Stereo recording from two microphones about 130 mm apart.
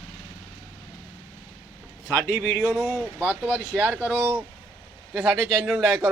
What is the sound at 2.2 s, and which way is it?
Speech, 15° left (ahead or behind).